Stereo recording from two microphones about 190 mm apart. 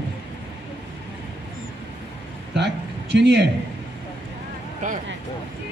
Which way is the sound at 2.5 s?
65° right (ahead or behind).